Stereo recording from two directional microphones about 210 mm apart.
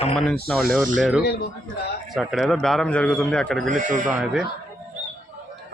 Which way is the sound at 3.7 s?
40° right (ahead or behind).